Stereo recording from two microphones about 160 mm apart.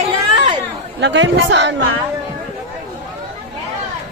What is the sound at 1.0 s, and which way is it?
Speech, 90° right.